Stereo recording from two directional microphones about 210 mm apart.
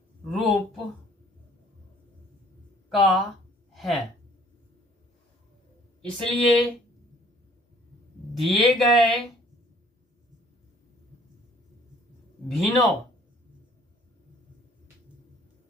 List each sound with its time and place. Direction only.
0.3 s speech: centre (ahead or behind)
2.9 s speech: centre (ahead or behind)
6.0 s speech: 5° left (ahead or behind)
8.4 s speech: centre (ahead or behind)
12.5 s speech: centre (ahead or behind)